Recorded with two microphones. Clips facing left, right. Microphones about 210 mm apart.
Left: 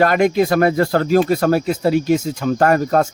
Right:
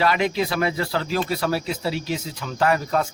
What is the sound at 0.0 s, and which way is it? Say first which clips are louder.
Speech: left 7 dB; 50° left (ahead or behind).